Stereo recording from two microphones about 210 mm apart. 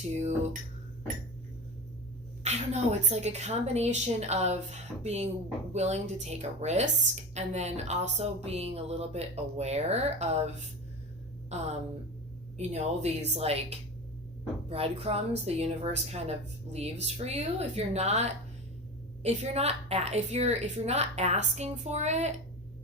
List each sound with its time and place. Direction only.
0.2 s speech: 35° right (ahead or behind)
2.4 s speech: 30° right (ahead or behind)